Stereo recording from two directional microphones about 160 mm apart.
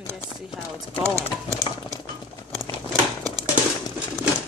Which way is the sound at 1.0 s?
20° right (ahead or behind).